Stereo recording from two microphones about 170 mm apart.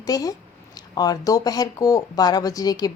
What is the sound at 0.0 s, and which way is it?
Speech, 20° left (ahead or behind).